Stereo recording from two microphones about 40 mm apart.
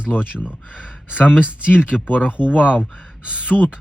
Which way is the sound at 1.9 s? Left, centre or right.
Left.